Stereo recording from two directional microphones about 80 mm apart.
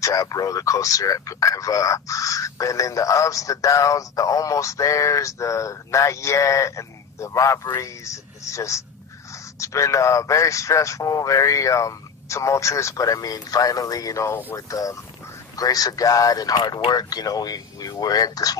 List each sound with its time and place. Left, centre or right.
0.0 s a man's voice: left